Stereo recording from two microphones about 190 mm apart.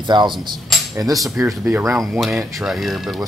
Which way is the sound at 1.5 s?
5° right (ahead or behind).